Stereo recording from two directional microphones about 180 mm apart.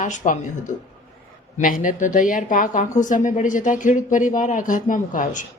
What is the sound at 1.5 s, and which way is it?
A woman's voice, 50° left (ahead or behind).